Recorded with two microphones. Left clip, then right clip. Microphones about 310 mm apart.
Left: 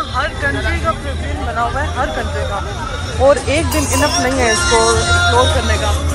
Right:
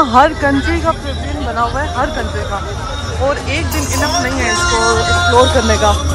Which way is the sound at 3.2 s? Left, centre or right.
Centre.